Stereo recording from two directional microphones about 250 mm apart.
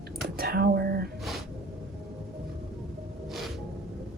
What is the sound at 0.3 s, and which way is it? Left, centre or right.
Speech, right.